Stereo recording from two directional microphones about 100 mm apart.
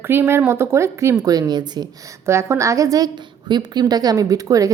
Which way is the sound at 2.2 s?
25° right (ahead or behind).